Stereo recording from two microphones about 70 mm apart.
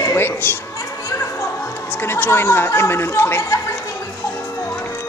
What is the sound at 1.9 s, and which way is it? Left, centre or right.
Chatter, left.